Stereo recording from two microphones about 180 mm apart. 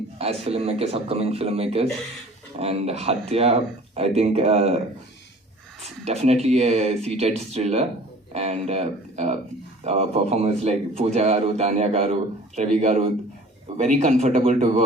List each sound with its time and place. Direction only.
0.4 s a man's voice: 35° right (ahead or behind)
5.8 s a man's voice: 35° right (ahead or behind)